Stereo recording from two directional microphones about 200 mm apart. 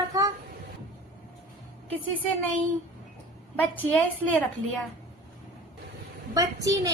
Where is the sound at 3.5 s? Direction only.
10° left (ahead or behind).